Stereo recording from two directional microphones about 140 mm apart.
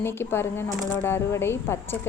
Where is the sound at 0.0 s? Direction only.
15° left (ahead or behind).